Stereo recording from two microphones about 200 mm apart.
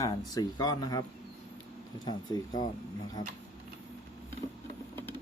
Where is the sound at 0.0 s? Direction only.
20° left (ahead or behind).